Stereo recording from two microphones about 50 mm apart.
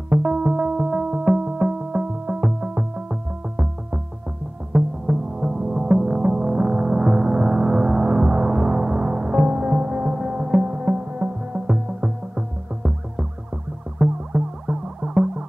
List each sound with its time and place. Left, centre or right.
0.2 s music: centre